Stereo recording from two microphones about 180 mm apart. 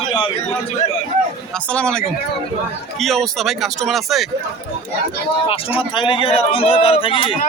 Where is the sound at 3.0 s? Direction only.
Centre (ahead or behind).